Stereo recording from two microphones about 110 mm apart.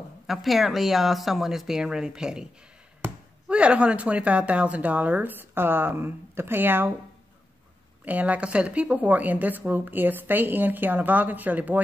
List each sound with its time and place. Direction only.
0.3 s speech: centre (ahead or behind); by 6.9 s 20° right (ahead or behind)
8.0 s speech: 15° right (ahead or behind)